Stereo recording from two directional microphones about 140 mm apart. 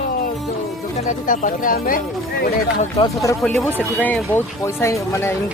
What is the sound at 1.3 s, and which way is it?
Speech, 75° left (ahead or behind).